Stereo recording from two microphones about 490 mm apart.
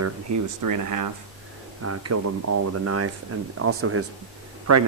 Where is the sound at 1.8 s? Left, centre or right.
Right.